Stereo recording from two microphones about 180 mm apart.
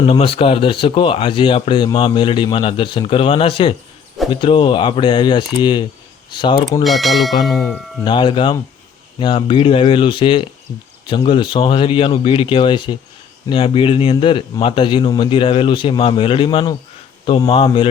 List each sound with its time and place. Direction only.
0.1 s speech: 30° left (ahead or behind)
6.8 s speech: centre (ahead or behind)
8.0 s speech: 25° left (ahead or behind)